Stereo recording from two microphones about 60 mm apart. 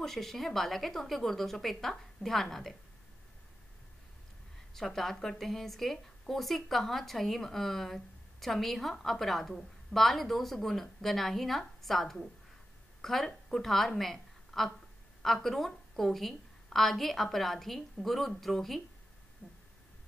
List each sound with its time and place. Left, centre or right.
0.0 s speech: centre
4.7 s a woman's voice: centre
19.4 s a sound: left